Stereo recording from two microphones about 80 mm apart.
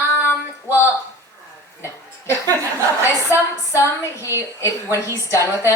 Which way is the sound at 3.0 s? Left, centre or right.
Left.